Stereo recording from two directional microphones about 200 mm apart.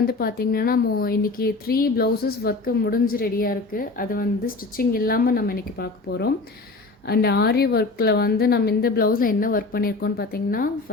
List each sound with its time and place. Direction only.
0.0 s speech: 50° left (ahead or behind)